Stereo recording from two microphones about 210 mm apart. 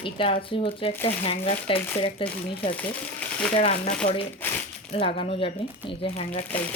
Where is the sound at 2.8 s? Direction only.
5° left (ahead or behind).